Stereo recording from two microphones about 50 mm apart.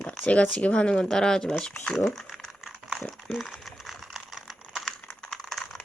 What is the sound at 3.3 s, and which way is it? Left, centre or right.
Typing, centre.